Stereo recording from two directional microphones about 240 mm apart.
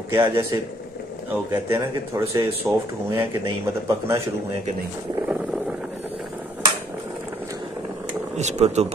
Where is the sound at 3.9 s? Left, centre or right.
Centre.